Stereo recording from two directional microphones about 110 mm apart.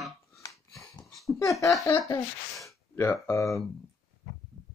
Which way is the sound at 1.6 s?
30° left (ahead or behind).